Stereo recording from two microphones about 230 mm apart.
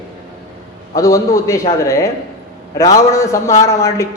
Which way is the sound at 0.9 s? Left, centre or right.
Centre.